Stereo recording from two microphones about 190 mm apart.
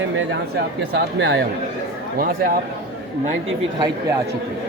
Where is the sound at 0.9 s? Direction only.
60° right (ahead or behind).